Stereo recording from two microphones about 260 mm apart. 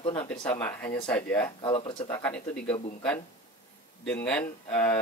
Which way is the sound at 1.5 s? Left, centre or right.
Centre.